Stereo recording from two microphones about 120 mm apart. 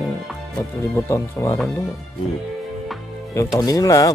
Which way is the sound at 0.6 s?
25° left (ahead or behind).